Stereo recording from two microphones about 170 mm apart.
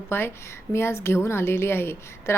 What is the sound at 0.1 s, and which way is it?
A woman's voice, 15° left (ahead or behind).